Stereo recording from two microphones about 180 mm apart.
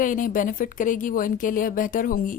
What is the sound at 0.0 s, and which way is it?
A woman's voice, 50° left (ahead or behind).